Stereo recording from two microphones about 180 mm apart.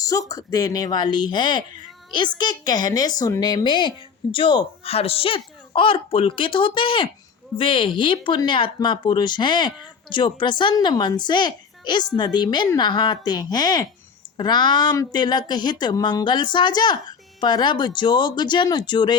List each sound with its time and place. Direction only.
0.0 s speech: 20° left (ahead or behind)